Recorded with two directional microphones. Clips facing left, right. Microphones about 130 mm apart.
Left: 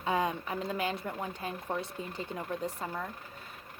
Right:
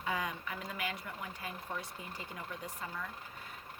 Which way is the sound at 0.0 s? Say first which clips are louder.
Left 7 dB; 30° left (ahead or behind).